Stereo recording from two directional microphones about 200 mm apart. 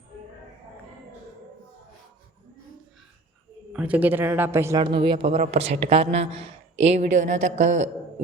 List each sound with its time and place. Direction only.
3.7 s a man's voice: 5° right (ahead or behind)
4.8 s speech: 25° right (ahead or behind)